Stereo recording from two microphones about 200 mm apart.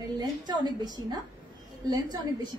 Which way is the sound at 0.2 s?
20° right (ahead or behind).